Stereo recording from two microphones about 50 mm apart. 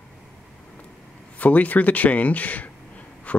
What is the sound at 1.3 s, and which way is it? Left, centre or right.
Speech, left.